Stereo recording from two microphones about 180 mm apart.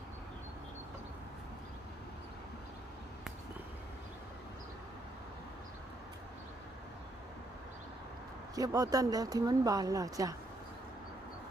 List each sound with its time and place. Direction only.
8.5 s speech: 20° right (ahead or behind)